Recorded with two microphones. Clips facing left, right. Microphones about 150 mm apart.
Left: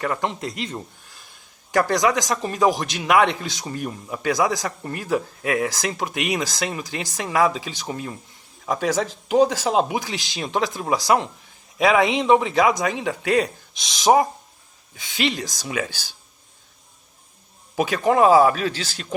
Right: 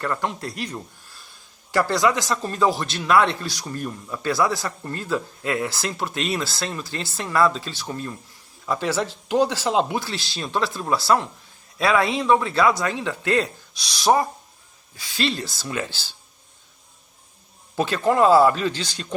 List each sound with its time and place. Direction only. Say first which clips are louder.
0.0 s speech: left 1 dB; 15° left (ahead or behind)
9.6 s speech: left 1 dB; 15° left (ahead or behind)
17.7 s speech: left 1 dB; 15° left (ahead or behind)